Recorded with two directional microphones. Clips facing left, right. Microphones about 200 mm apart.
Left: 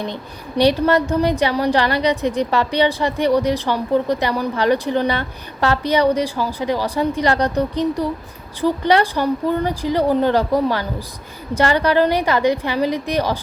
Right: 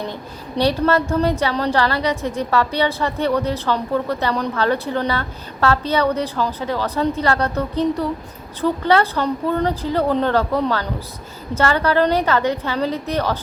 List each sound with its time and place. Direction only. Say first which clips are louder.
0.1 s a woman's voice: left 1 dB; 15° left (ahead or behind)